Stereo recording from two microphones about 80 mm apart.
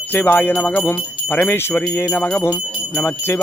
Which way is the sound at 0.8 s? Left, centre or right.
Left.